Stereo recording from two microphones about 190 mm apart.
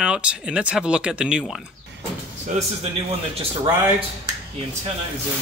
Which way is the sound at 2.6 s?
40° right (ahead or behind).